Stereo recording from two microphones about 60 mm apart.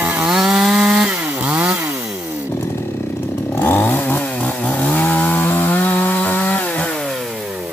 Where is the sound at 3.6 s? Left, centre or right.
Left.